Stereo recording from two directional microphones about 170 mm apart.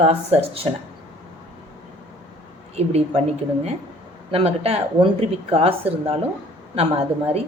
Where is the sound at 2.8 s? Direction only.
40° right (ahead or behind).